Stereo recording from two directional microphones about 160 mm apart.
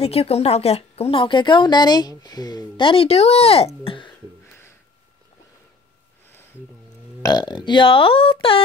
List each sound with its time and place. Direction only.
0.0 s a woman's voice: 40° left (ahead or behind)
7.2 s a woman's voice: 25° left (ahead or behind)